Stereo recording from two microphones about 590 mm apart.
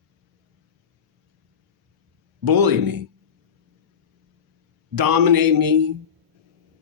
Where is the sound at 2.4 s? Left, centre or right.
Right.